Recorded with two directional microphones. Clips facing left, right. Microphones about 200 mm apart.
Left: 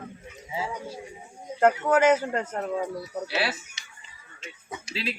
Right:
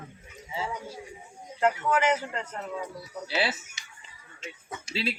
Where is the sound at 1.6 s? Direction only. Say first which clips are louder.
Left 5 dB; 45° left (ahead or behind).